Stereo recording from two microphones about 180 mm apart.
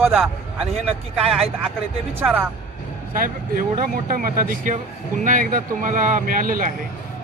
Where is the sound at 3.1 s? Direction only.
50° right (ahead or behind).